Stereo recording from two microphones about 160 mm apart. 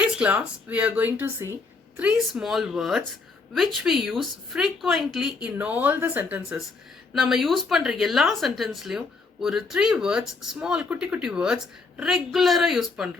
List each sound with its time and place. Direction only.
0.0 s speech: 10° right (ahead or behind)